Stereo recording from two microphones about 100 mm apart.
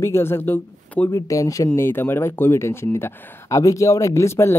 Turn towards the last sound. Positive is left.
turn(degrees=25)  # may be behind; listen again after turning